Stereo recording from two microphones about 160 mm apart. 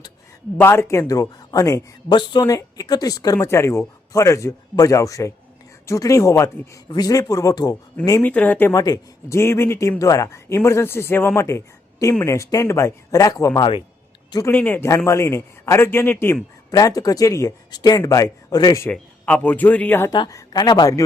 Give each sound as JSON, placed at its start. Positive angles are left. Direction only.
{"t": 0.6, "sound": "a woman's voice", "side_deg": 15}
{"t": 8.2, "sound": "a woman's voice", "side_deg": 10}
{"t": 14.5, "sound": "a woman's voice", "side_deg": 10}
{"t": 18.9, "sound": "speech", "side_deg": 10}
{"t": 20.1, "sound": "a woman's voice", "side_deg": 25}